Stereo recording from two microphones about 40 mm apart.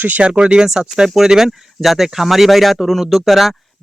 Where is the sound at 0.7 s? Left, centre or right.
Centre.